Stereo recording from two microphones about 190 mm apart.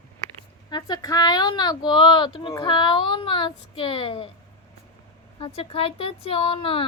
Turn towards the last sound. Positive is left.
turn(degrees=30)  # may be behind; listen again after turning